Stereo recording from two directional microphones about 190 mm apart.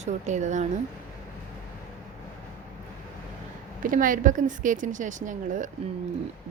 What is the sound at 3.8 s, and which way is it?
Speech, 45° right (ahead or behind).